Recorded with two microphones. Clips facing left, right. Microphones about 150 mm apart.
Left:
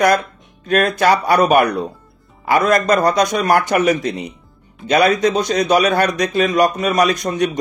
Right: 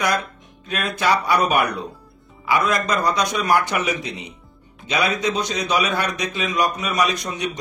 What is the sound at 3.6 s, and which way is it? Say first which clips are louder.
A man's voice: left 8 dB; 50° left (ahead or behind).